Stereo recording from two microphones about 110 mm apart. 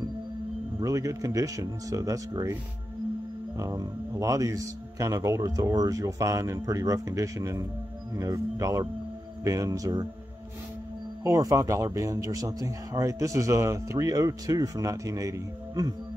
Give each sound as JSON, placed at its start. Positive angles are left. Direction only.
{"t": 0.7, "sound": "a man's voice", "side_deg": -30}
{"t": 3.5, "sound": "a man's voice", "side_deg": -30}
{"t": 11.2, "sound": "a man's voice", "side_deg": -30}